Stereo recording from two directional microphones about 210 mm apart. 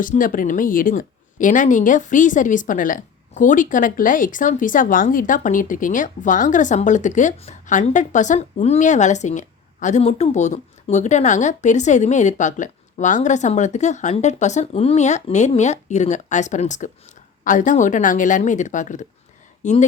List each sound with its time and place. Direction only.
0.0 s speech: 40° left (ahead or behind)